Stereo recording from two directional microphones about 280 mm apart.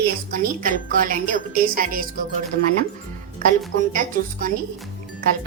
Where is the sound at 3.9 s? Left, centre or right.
Right.